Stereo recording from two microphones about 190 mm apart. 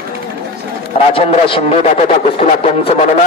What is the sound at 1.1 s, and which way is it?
Speech, 30° left (ahead or behind).